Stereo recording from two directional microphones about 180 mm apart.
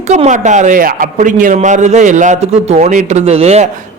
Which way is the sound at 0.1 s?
40° right (ahead or behind).